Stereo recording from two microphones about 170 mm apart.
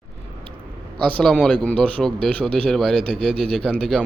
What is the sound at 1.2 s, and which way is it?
Speech, centre (ahead or behind).